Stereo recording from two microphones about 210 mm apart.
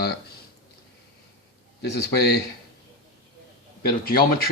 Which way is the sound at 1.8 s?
50° left (ahead or behind).